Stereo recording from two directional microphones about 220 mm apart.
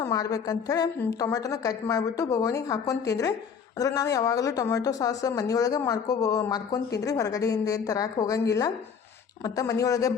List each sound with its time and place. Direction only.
0.0 s speech: 15° left (ahead or behind)